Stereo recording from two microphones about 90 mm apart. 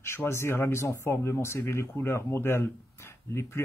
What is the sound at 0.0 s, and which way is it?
Speech, 30° left (ahead or behind).